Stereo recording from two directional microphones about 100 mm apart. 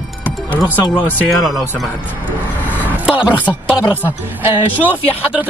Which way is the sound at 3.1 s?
15° right (ahead or behind).